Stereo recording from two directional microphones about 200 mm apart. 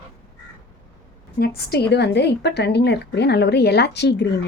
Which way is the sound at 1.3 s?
50° left (ahead or behind).